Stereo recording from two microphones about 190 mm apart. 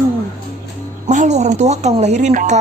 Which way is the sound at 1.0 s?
40° right (ahead or behind).